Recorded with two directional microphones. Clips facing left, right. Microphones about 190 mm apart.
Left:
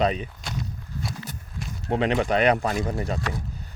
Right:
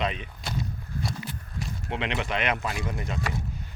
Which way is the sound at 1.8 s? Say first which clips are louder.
Left 9 dB; 40° left (ahead or behind).